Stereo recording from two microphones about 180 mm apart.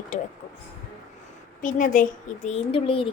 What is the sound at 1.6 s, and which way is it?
Speech, 45° left (ahead or behind).